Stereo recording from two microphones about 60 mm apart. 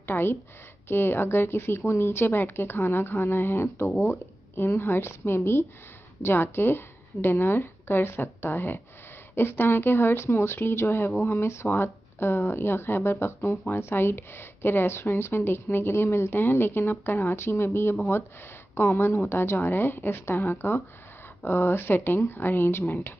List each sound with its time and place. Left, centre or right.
0.0 s a woman's voice: left